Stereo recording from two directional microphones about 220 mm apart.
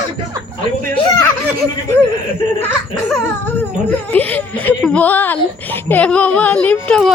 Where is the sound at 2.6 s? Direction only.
10° left (ahead or behind).